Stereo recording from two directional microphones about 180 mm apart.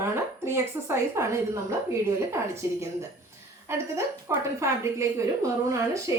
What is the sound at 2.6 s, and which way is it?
A woman's voice, 15° right (ahead or behind).